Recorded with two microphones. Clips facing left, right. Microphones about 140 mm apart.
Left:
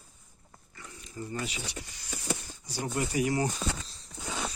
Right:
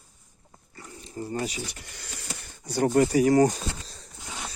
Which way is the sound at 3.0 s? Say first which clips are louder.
Right 9 dB; 40° right (ahead or behind).